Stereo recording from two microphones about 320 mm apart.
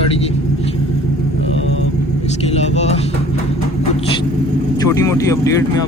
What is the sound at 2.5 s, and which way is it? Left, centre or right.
Vehicle, centre.